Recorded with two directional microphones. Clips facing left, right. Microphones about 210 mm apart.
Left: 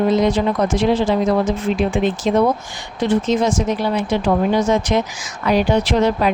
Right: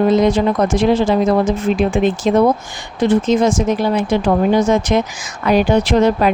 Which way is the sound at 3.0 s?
50° right (ahead or behind).